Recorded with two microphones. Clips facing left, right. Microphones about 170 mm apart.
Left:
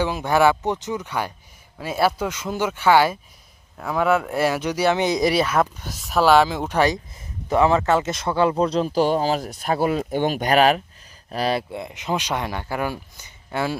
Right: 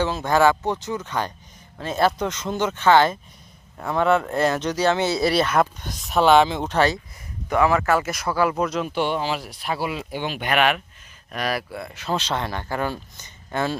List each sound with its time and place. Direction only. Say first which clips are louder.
0.0 s speech: even; 15° left (ahead or behind)
7.5 s speech: left 2 dB; 25° left (ahead or behind); by 13.7 s 10° left (ahead or behind)